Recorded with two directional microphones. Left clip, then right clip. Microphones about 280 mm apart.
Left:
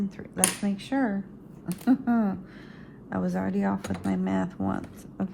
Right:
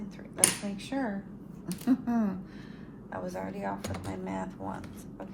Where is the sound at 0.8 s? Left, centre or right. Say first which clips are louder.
Left 6 dB; left.